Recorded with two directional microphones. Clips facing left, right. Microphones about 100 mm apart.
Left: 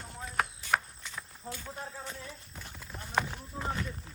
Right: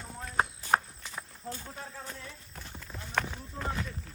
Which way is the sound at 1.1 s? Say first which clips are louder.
Right 2 dB; 40° right (ahead or behind).